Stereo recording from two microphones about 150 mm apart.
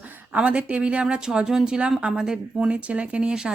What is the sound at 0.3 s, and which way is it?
Speech, 10° right (ahead or behind).